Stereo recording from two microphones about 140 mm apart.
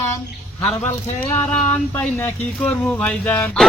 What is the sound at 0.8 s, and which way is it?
Speech, 10° left (ahead or behind).